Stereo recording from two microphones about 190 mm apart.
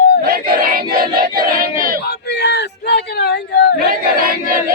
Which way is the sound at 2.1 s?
60° left (ahead or behind).